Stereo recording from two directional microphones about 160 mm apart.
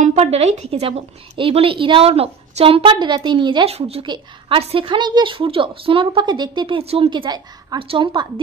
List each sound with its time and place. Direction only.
0.0 s a woman's voice: 40° right (ahead or behind)